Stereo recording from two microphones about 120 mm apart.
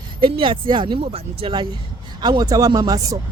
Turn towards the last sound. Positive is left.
turn(degrees=-30)  # may be behind; listen again after turning